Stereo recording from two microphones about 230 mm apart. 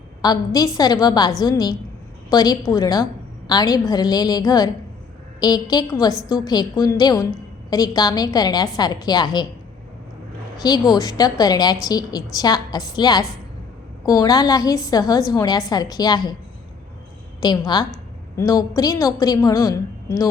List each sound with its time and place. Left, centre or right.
0.2 s a woman's voice: centre
10.6 s a woman's voice: centre
17.4 s a woman's voice: centre